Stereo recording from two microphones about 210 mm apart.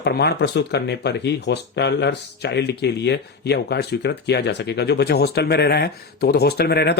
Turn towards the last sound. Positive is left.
turn(degrees=50)  # may be behind; listen again after turning